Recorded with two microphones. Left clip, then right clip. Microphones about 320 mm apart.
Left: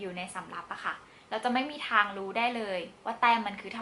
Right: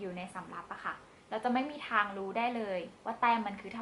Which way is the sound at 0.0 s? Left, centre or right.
Centre.